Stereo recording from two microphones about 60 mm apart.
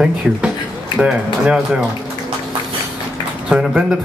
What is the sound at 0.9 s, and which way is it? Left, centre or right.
Speech, centre.